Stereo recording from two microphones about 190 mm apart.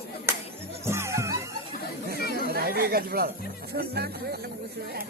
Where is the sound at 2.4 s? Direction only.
55° right (ahead or behind).